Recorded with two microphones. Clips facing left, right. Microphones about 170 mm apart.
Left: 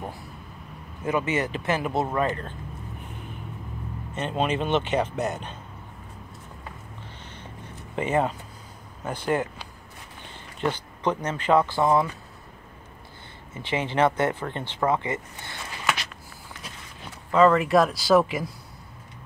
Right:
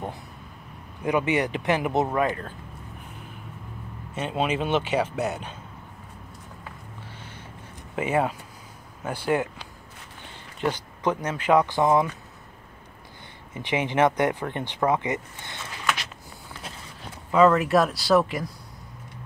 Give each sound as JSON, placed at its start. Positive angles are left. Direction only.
{"t": 1.0, "sound": "speech", "side_deg": -15}
{"t": 4.1, "sound": "speech", "side_deg": -5}
{"t": 7.9, "sound": "speech", "side_deg": -10}
{"t": 10.6, "sound": "speech", "side_deg": -10}
{"t": 13.6, "sound": "speech", "side_deg": -15}
{"t": 17.3, "sound": "speech", "side_deg": -5}